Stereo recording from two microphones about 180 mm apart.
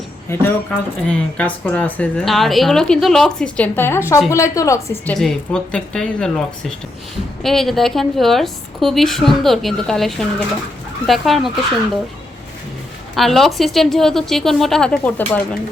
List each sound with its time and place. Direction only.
0.3 s a woman's voice: 10° left (ahead or behind)
5.1 s speech: centre (ahead or behind)
13.1 s speech: centre (ahead or behind)